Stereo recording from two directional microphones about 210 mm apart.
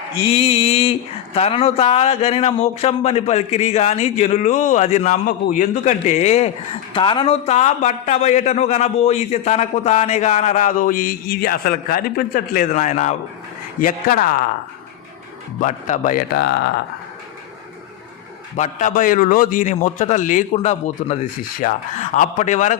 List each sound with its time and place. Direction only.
0.2 s a man's voice: 25° left (ahead or behind); by 14.4 s 40° left (ahead or behind)
15.6 s speech: 35° left (ahead or behind)
16.3 s speech: 55° left (ahead or behind)
18.5 s speech: 35° left (ahead or behind)